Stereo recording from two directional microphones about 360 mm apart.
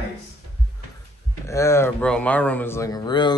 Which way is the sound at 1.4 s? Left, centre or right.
Centre.